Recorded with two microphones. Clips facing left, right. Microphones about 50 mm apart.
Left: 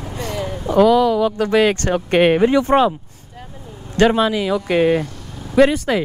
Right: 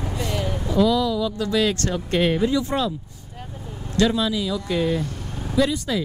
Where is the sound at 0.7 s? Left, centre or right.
Left.